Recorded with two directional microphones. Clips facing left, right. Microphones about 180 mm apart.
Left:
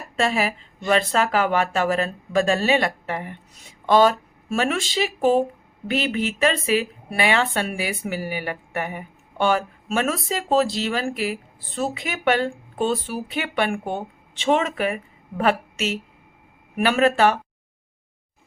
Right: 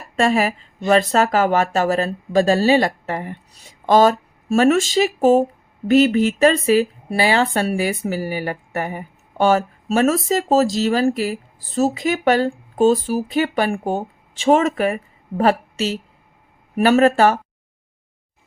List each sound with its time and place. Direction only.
0.2 s speech: 45° right (ahead or behind)